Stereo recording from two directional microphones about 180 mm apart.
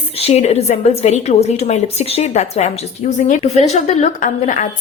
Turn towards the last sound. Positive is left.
turn(degrees=45)  # may be behind; listen again after turning